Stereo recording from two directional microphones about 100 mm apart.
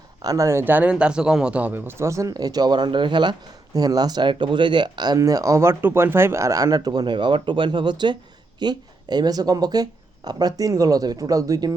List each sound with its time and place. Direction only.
0.2 s speech: 35° right (ahead or behind)
0.6 s speech: 20° right (ahead or behind); by 11.7 s 35° right (ahead or behind)